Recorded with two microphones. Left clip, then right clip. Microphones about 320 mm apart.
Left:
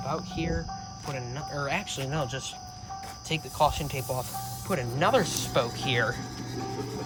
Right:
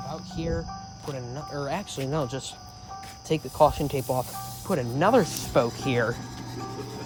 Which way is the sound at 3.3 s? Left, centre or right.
Right.